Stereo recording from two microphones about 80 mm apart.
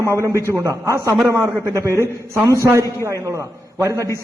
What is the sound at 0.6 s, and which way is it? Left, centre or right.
A man's voice, right.